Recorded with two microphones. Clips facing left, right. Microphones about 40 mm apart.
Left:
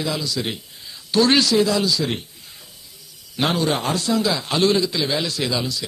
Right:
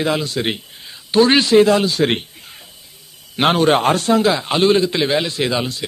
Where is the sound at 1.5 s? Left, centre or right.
Right.